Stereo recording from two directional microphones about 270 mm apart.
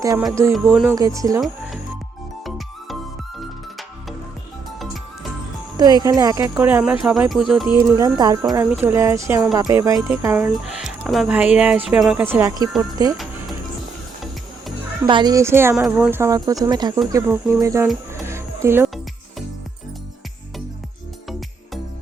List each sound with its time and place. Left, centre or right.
0.0 s speech: centre
5.7 s speech: centre
7.8 s speech: centre
15.0 s speech: centre
17.8 s music: centre